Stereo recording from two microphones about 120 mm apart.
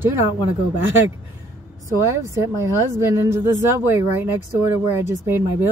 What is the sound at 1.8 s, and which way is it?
Speech, 25° right (ahead or behind).